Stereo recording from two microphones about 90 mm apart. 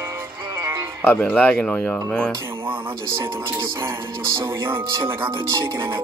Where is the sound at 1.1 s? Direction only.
15° left (ahead or behind).